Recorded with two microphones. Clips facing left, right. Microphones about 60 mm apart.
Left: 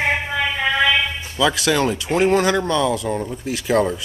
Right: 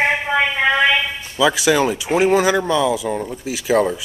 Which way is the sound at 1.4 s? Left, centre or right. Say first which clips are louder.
Right 3 dB; centre.